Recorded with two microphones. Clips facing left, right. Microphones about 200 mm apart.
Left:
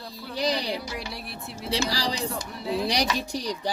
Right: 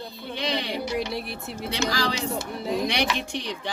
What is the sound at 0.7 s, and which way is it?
Speech, centre (ahead or behind).